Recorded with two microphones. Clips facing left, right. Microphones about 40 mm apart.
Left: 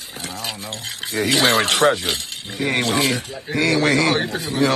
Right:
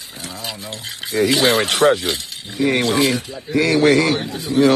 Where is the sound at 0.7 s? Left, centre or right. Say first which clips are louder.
Right 2 dB; left.